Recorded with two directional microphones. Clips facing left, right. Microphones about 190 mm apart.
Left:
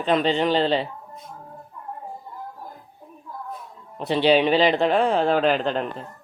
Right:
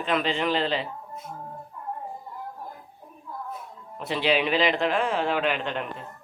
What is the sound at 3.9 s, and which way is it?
Speech, 35° left (ahead or behind).